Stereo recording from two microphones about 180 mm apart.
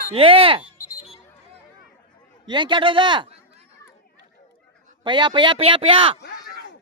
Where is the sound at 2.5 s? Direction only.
25° right (ahead or behind).